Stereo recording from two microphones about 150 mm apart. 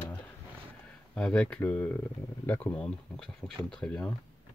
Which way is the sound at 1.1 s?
5° left (ahead or behind).